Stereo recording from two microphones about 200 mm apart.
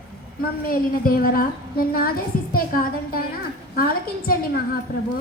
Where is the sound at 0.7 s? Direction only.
45° left (ahead or behind).